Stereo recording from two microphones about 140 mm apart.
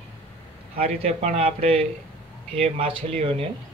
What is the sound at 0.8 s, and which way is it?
Speech, 45° right (ahead or behind).